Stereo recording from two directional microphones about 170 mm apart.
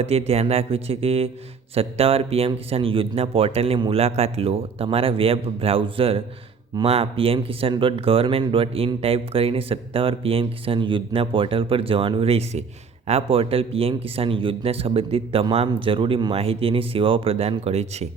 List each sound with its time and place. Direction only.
0.0 s speech: 35° right (ahead or behind)